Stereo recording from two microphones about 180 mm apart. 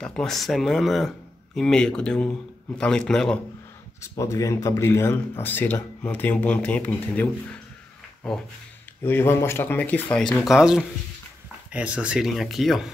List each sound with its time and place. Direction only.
0.0 s speech: 5° left (ahead or behind)
4.0 s speech: 15° left (ahead or behind)
9.0 s speech: 10° left (ahead or behind)